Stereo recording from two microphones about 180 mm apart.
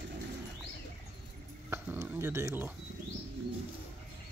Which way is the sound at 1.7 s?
15° right (ahead or behind).